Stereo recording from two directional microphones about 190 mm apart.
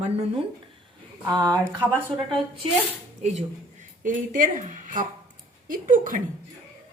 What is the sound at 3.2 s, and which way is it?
Speech, 35° right (ahead or behind).